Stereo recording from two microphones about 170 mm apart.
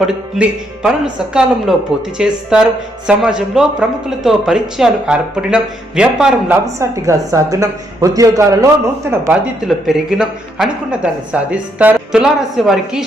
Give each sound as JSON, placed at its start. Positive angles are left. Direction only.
{"t": 0.0, "sound": "speech", "side_deg": -5}
{"t": 6.7, "sound": "a woman's voice", "side_deg": -20}
{"t": 9.6, "sound": "speech", "side_deg": 0}